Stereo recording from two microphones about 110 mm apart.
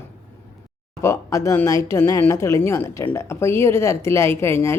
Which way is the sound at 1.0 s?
25° left (ahead or behind).